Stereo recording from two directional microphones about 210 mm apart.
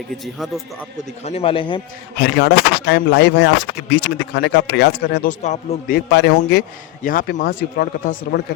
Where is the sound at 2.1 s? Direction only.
55° left (ahead or behind); by 6.0 s 35° left (ahead or behind).